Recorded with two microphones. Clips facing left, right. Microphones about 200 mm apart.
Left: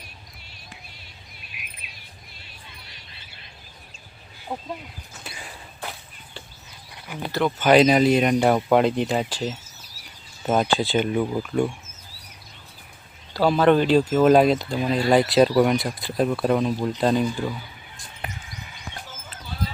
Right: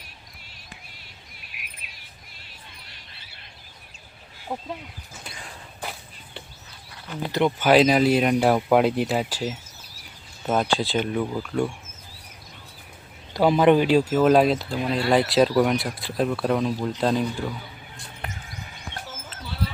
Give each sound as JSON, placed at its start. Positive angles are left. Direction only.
{"t": 5.2, "sound": "a sound", "side_deg": 5}
{"t": 7.1, "sound": "speech", "side_deg": 10}
{"t": 7.6, "sound": "speech", "side_deg": -5}
{"t": 13.3, "sound": "speech", "side_deg": -15}
{"t": 18.2, "sound": "basketball bounce", "side_deg": 5}